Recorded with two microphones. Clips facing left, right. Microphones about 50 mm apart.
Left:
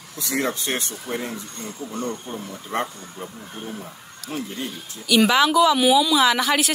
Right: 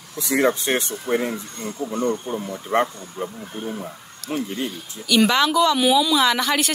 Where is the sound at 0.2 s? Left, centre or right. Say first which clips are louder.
Right 5 dB; right.